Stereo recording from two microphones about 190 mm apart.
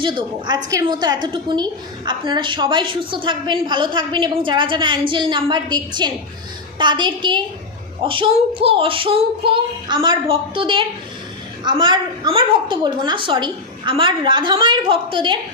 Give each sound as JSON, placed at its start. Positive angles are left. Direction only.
{"t": 0.0, "sound": "a woman's voice", "side_deg": -25}